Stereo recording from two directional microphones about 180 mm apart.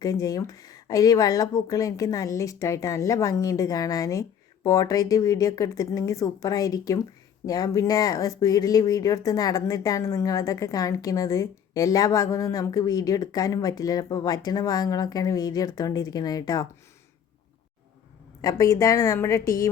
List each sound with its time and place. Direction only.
0.0 s speech: 20° left (ahead or behind)
18.4 s a woman's voice: 20° left (ahead or behind)